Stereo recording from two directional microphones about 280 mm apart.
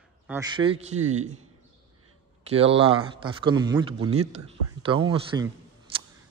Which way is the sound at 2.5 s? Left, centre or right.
Centre.